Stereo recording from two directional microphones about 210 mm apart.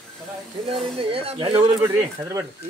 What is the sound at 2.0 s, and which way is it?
Speech, 10° right (ahead or behind).